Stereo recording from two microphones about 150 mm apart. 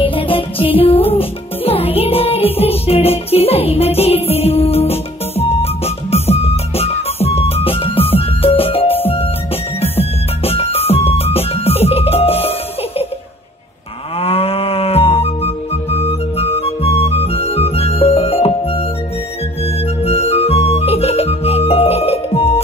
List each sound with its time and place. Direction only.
0.0 s music: 35° left (ahead or behind)
14.2 s cattle: 40° left (ahead or behind)
19.6 s music: 45° left (ahead or behind)